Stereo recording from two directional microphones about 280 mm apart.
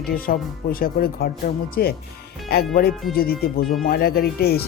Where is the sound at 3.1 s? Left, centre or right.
Left.